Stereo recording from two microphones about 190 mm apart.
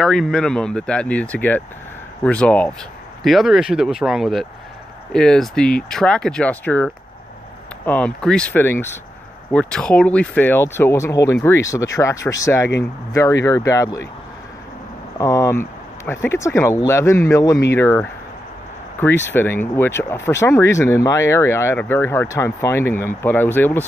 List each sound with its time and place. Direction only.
0.0 s speech: 5° left (ahead or behind)
15.1 s speech: 15° left (ahead or behind)